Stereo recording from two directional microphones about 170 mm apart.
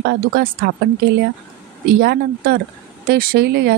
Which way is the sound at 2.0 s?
65° right (ahead or behind).